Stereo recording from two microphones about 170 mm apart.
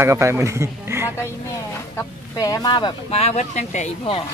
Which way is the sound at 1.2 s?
15° left (ahead or behind).